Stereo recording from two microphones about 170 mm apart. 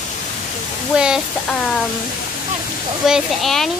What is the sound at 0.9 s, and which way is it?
Speech, 5° right (ahead or behind).